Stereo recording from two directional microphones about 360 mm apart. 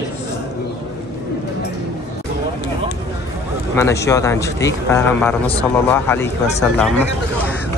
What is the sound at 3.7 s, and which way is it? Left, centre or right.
Speech, centre.